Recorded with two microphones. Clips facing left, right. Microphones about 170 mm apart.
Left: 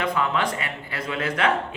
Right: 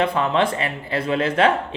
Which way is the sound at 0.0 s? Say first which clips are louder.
Right 5 dB; 30° right (ahead or behind).